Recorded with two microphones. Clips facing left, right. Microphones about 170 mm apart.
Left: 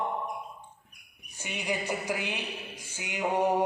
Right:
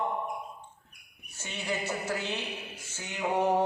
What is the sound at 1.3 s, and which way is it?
A woman's voice, 15° left (ahead or behind).